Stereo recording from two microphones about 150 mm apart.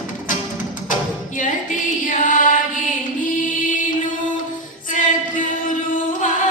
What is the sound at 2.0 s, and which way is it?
Music, 60° left (ahead or behind).